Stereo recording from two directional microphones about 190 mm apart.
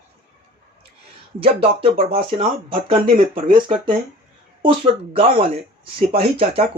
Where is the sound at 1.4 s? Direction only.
30° right (ahead or behind).